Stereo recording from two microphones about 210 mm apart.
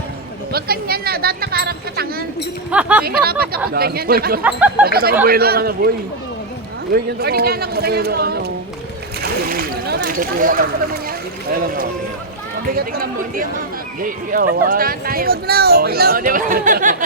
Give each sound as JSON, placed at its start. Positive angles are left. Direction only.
{"t": 0.5, "sound": "speech", "side_deg": -45}
{"t": 2.6, "sound": "speech", "side_deg": -5}
{"t": 3.0, "sound": "speech", "side_deg": -45}
{"t": 4.4, "sound": "speech", "side_deg": -5}
{"t": 4.9, "sound": "speech", "side_deg": -45}
{"t": 6.9, "sound": "speech", "side_deg": -45}
{"t": 12.7, "sound": "speech", "side_deg": -45}